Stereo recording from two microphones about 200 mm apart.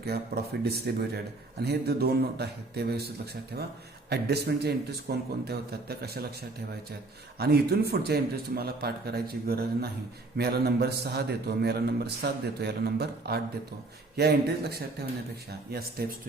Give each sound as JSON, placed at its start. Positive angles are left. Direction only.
{"t": 0.6, "sound": "a man's voice", "side_deg": -50}
{"t": 7.3, "sound": "a man's voice", "side_deg": -50}